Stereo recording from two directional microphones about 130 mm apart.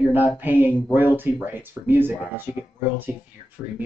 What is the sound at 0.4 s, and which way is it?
Speech, 15° right (ahead or behind).